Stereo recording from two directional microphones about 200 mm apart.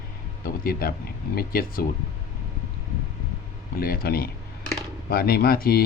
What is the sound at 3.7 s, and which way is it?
Speech, 50° left (ahead or behind).